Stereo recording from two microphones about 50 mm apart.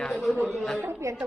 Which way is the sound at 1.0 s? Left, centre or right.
Right.